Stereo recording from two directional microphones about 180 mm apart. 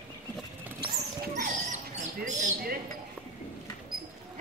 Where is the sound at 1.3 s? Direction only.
45° right (ahead or behind).